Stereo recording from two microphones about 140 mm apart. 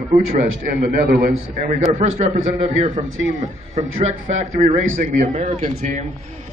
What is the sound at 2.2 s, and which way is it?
Speech, 50° right (ahead or behind).